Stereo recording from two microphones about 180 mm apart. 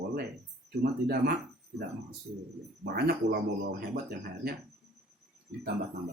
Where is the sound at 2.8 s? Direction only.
60° right (ahead or behind).